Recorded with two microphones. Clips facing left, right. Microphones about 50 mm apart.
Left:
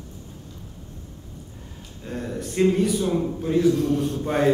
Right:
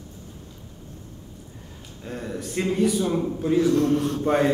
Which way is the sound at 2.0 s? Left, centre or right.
Centre.